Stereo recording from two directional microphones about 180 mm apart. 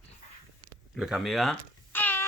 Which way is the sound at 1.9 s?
10° left (ahead or behind).